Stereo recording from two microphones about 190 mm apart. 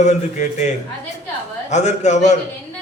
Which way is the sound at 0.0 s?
40° left (ahead or behind).